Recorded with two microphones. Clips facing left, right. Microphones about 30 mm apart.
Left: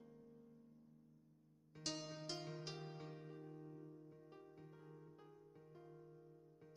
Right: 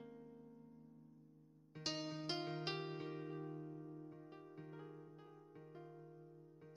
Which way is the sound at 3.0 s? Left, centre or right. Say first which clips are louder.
Right 7 dB; right.